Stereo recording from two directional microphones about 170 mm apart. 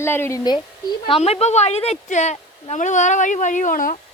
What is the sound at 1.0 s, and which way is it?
A woman's voice, 35° left (ahead or behind).